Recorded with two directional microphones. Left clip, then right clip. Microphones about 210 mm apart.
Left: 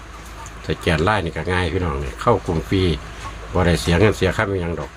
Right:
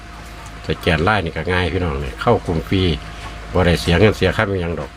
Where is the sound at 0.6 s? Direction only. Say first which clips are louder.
Right 2 dB; 10° right (ahead or behind).